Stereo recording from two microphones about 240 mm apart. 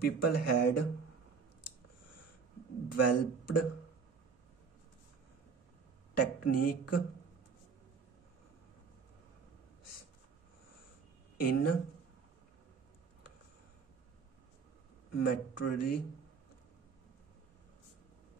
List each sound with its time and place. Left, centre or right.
0.0 s speech: left
2.9 s speech: left
6.1 s speech: left
11.3 s speech: left
15.1 s speech: left